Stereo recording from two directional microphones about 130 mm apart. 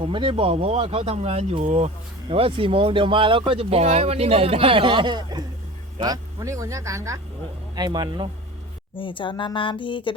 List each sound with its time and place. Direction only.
0.0 s speech: 40° right (ahead or behind); by 1.9 s 60° right (ahead or behind)
2.3 s speech: 45° right (ahead or behind)
9.0 s a woman's voice: 40° left (ahead or behind)